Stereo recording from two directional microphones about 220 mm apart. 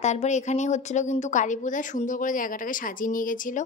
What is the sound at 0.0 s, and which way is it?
A woman's voice, 30° left (ahead or behind).